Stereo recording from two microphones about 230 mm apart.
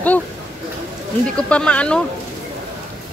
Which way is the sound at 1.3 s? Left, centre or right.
Centre.